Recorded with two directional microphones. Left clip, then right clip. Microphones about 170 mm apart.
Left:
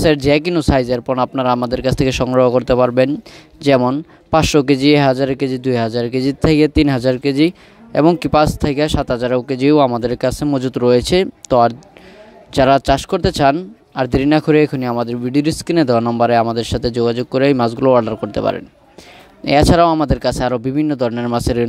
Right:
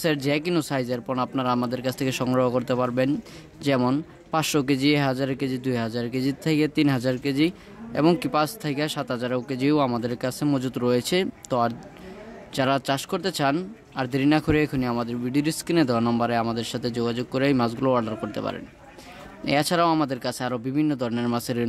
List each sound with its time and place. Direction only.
0.0 s speech: 45° left (ahead or behind)